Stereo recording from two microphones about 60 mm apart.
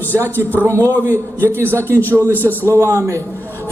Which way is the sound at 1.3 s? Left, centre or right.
Right.